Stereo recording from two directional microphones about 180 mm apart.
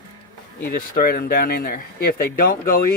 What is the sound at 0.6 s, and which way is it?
Speech, 55° left (ahead or behind).